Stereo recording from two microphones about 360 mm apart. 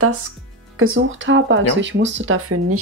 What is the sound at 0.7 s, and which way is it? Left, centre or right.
Speech, right.